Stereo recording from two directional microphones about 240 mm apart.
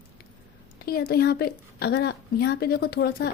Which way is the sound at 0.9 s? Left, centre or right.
Left.